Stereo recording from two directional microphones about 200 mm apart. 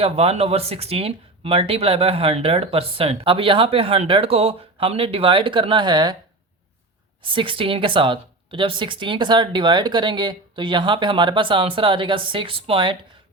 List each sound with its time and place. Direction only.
0.0 s speech: 30° right (ahead or behind)
7.3 s speech: 25° right (ahead or behind)